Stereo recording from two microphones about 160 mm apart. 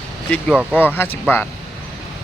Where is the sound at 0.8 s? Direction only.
10° left (ahead or behind).